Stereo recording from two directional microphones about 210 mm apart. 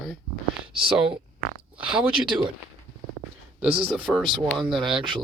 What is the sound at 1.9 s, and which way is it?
Speech, 5° right (ahead or behind).